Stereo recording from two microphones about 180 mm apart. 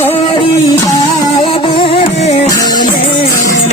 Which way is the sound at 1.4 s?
30° left (ahead or behind).